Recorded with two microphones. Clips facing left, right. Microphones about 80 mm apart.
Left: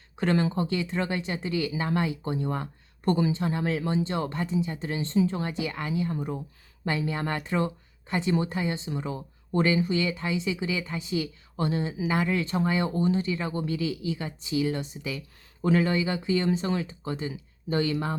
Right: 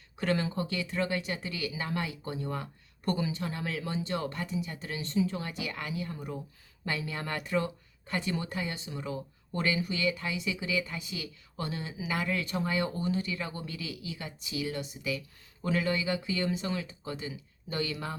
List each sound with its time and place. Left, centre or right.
0.2 s speech: left